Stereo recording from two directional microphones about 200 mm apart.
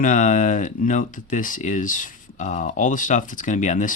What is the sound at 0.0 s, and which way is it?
Speech, 40° left (ahead or behind).